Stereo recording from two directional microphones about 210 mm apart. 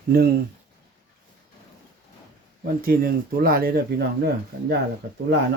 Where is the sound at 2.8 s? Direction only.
45° right (ahead or behind).